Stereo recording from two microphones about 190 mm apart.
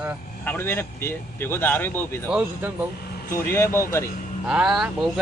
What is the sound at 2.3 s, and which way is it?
Speech, 5° right (ahead or behind).